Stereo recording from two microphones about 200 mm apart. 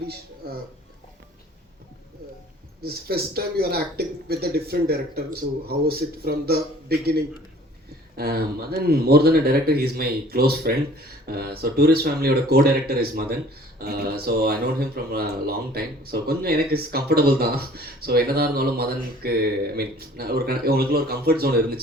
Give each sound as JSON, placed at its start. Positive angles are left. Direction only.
{"t": 0.1, "sound": "speech", "side_deg": -50}
{"t": 2.8, "sound": "speech", "side_deg": -50}